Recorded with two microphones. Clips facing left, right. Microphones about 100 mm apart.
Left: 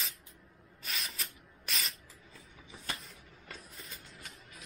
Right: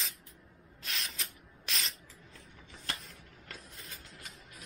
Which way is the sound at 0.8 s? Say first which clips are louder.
Even; centre (ahead or behind).